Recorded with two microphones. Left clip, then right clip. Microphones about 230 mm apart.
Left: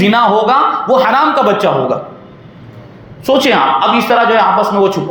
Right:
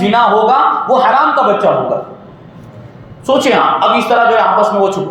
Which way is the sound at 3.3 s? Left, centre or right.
Left.